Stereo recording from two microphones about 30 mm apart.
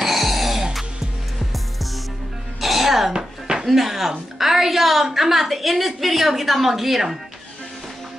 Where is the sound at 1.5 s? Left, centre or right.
Centre.